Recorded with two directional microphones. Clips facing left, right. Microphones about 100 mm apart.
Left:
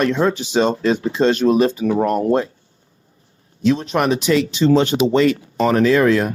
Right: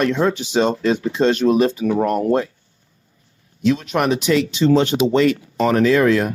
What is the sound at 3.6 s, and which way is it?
Speech, 35° left (ahead or behind).